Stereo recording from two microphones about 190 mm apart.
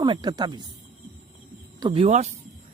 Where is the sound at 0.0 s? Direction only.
25° right (ahead or behind).